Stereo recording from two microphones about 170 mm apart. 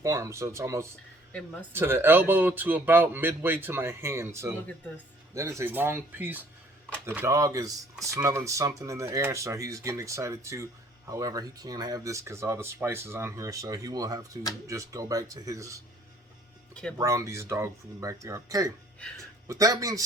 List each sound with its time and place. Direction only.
0.0 s speech: 15° right (ahead or behind)
17.0 s speech: 20° right (ahead or behind)
18.9 s speech: 5° left (ahead or behind)
19.5 s speech: 20° right (ahead or behind)